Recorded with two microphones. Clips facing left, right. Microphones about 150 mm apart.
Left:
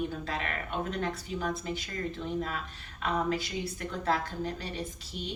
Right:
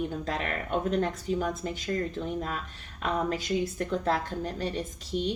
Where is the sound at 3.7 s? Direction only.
40° right (ahead or behind).